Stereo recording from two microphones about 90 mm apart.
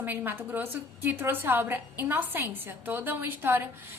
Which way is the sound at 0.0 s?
20° right (ahead or behind).